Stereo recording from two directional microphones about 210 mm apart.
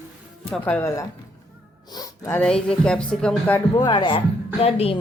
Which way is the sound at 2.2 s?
5° left (ahead or behind).